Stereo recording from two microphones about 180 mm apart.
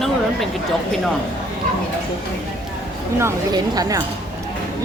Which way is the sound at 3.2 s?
20° right (ahead or behind).